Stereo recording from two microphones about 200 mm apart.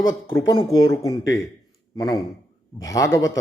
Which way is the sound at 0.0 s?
20° left (ahead or behind).